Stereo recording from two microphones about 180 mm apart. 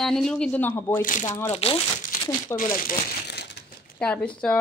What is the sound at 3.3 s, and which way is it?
Crushing, 70° left (ahead or behind).